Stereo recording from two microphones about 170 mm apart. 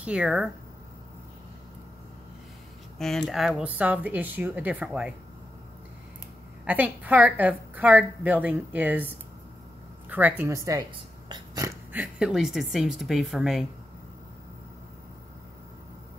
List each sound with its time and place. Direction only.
0.0 s speech: 5° right (ahead or behind)
3.0 s a woman's voice: centre (ahead or behind)
6.6 s a woman's voice: 10° right (ahead or behind)
10.0 s a sound: 10° right (ahead or behind)
12.0 s speech: 5° right (ahead or behind)